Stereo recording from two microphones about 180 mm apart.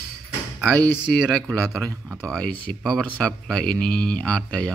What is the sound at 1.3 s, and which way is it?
Speech, 5° left (ahead or behind).